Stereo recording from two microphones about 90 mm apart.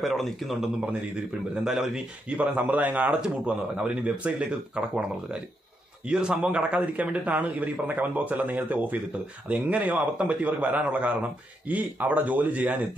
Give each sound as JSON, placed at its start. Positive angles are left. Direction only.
{"t": 0.0, "sound": "a man's voice", "side_deg": 0}